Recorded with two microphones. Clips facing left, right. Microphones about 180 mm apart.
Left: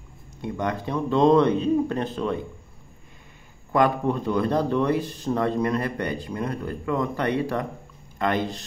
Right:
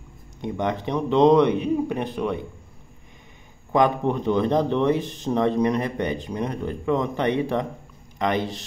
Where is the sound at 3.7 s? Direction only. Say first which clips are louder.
Right 1 dB; 20° right (ahead or behind).